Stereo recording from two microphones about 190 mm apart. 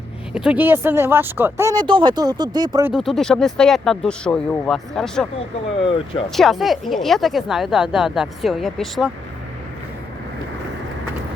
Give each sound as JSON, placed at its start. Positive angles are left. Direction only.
{"t": 0.3, "sound": "speech", "side_deg": -5}
{"t": 1.7, "sound": "speech", "side_deg": -25}
{"t": 2.8, "sound": "speech", "side_deg": 0}
{"t": 5.8, "sound": "speech", "side_deg": 30}
{"t": 6.3, "sound": "speech", "side_deg": 0}